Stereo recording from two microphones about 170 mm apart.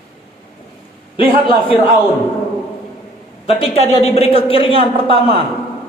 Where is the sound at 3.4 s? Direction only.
35° left (ahead or behind).